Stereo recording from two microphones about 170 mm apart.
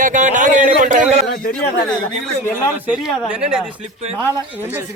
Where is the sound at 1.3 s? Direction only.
60° left (ahead or behind).